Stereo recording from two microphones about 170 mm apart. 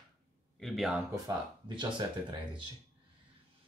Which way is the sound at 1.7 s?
30° right (ahead or behind).